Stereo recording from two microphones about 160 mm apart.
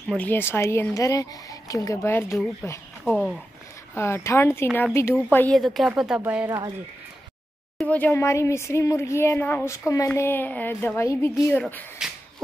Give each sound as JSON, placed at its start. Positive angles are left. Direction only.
{"t": 0.1, "sound": "speech", "side_deg": 10}
{"t": 5.6, "sound": "speech", "side_deg": 0}
{"t": 7.7, "sound": "speech", "side_deg": 10}
{"t": 11.6, "sound": "speech", "side_deg": 0}